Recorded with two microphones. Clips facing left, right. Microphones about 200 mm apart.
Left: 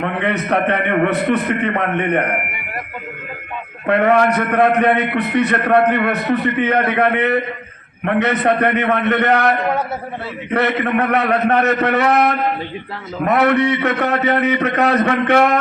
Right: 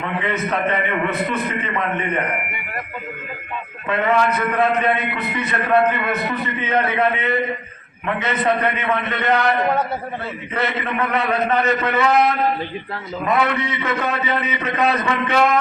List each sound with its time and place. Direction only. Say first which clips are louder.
0.0 s a man's voice: left 3 dB; 65° left (ahead or behind)
3.8 s a man's voice: left 5 dB; 60° left (ahead or behind)